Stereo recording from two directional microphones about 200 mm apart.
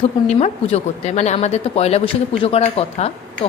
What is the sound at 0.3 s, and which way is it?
A woman's voice, 30° left (ahead or behind).